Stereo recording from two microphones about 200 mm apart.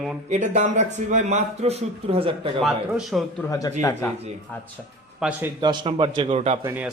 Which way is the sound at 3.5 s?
15° left (ahead or behind).